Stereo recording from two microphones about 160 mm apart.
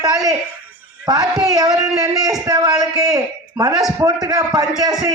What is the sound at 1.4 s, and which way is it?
Speech, 20° right (ahead or behind).